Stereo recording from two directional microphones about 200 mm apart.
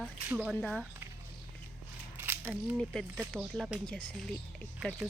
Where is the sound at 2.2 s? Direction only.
10° right (ahead or behind).